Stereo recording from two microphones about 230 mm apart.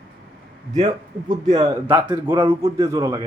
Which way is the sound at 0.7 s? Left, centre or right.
Right.